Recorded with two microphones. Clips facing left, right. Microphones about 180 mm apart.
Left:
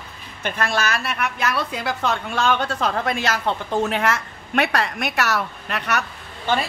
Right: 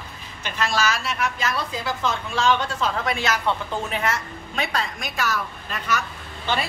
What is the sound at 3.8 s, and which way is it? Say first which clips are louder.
A woman's voice: left 5 dB; 65° left (ahead or behind).